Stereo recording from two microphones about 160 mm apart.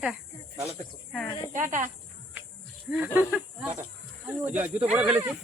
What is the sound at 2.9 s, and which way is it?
Speech, 5° right (ahead or behind).